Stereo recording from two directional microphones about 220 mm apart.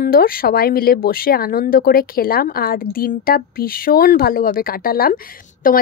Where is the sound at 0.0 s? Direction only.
40° left (ahead or behind).